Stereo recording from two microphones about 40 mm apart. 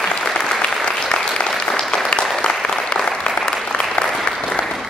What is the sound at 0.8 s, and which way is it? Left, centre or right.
Applause, left.